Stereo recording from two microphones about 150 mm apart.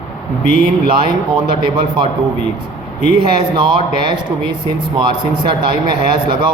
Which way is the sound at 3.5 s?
30° right (ahead or behind).